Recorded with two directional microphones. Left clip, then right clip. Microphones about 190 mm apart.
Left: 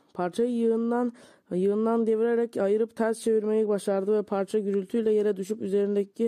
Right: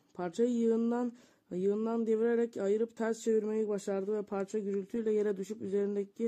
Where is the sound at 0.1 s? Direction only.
40° left (ahead or behind).